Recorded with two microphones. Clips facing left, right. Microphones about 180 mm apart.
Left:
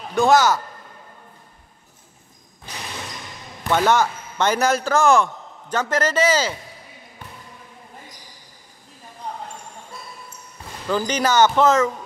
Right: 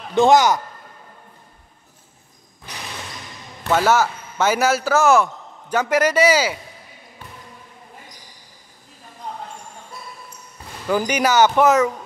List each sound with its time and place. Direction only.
0.1 s speech: 20° right (ahead or behind)
3.6 s a man's voice: 5° right (ahead or behind)
10.9 s speech: 10° right (ahead or behind)